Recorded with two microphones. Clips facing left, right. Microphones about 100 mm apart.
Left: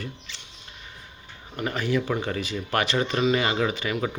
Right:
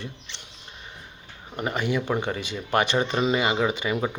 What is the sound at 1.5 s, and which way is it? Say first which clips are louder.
Speech: even; 20° right (ahead or behind).